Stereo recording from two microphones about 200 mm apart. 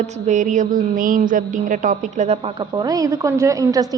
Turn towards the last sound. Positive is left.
turn(degrees=-15)  # may be behind; listen again after turning